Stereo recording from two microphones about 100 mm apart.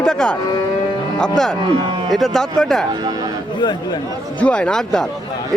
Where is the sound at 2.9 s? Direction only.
45° right (ahead or behind).